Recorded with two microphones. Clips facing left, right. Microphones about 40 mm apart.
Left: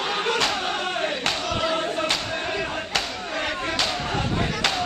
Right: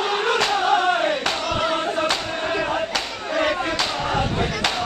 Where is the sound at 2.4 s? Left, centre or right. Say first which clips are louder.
Right 8 dB; right.